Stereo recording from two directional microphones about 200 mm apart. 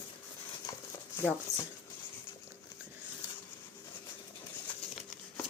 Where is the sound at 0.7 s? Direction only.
20° left (ahead or behind).